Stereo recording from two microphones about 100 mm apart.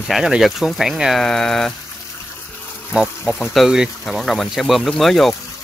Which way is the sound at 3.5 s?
5° right (ahead or behind).